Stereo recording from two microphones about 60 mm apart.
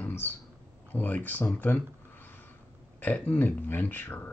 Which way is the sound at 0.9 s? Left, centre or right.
Left.